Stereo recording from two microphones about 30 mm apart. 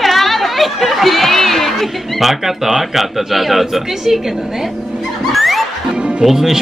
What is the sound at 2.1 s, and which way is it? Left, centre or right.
Speech, centre.